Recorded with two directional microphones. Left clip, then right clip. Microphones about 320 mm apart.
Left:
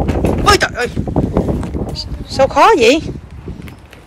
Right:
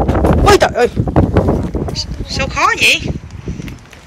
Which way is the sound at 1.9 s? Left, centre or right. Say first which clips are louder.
Left 3 dB; centre.